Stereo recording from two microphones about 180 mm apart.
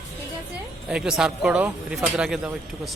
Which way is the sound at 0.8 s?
5° right (ahead or behind).